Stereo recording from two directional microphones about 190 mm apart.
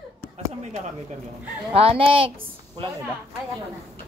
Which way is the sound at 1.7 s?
30° right (ahead or behind).